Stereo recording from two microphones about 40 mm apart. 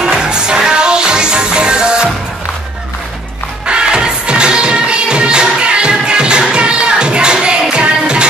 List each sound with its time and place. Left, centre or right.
0.2 s music: right
3.6 s music: right